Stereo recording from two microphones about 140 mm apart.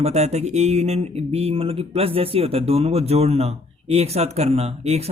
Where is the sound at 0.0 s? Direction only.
50° right (ahead or behind).